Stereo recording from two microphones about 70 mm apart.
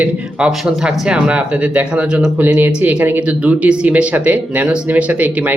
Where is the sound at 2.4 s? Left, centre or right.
Right.